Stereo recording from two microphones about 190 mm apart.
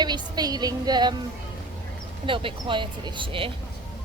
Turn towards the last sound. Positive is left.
turn(degrees=-25)  # may be behind; listen again after turning